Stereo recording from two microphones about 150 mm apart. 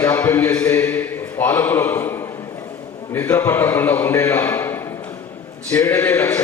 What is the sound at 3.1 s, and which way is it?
A man's voice, 15° left (ahead or behind).